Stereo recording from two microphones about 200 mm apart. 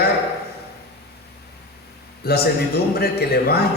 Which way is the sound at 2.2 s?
55° left (ahead or behind).